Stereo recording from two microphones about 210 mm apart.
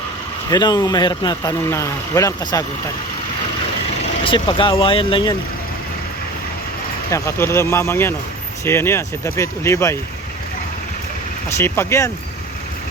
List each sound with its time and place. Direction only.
0.5 s speech: 20° left (ahead or behind)
4.2 s speech: 25° left (ahead or behind)
7.1 s speech: 10° left (ahead or behind)
11.4 s speech: 10° left (ahead or behind)